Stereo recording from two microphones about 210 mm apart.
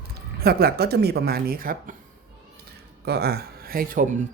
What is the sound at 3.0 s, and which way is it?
Speech, 50° right (ahead or behind).